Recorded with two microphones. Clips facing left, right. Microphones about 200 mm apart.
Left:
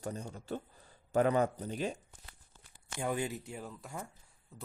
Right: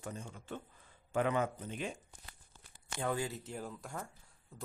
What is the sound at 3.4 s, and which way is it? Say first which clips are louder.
Speech: right 1 dB; centre (ahead or behind).